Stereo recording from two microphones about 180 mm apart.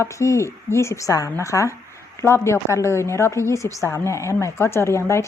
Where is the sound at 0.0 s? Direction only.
15° left (ahead or behind).